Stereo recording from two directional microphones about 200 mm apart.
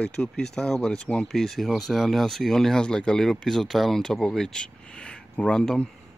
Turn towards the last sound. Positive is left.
turn(degrees=5)  # may be behind; listen again after turning